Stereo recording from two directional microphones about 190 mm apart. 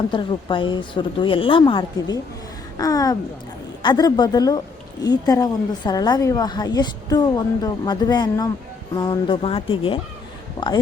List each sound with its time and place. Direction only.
0.1 s a woman's voice: 25° left (ahead or behind)